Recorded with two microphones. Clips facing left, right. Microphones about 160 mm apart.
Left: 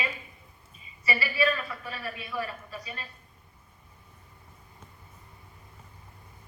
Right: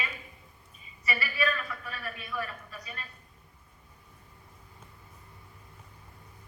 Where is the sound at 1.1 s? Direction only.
30° left (ahead or behind).